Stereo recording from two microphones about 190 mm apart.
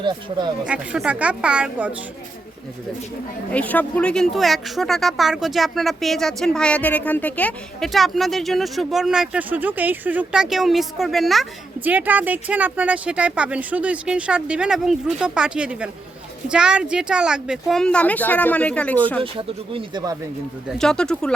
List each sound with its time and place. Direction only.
0.0 s speech: 25° right (ahead or behind)
0.6 s speech: 5° right (ahead or behind)
3.5 s speech: 10° left (ahead or behind)
19.2 s speech: 25° right (ahead or behind)
20.7 s speech: 5° left (ahead or behind)